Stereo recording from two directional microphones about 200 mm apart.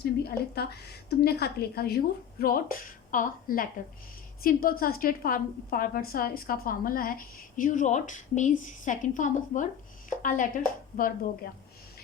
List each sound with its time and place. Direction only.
0.0 s a woman's voice: 50° left (ahead or behind)